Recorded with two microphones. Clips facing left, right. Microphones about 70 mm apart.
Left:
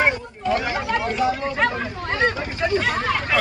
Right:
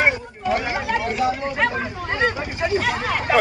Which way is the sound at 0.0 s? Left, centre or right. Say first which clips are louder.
Right 1 dB; right.